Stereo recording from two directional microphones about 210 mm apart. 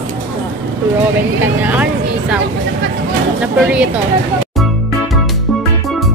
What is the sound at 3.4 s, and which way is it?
Speech, 5° right (ahead or behind).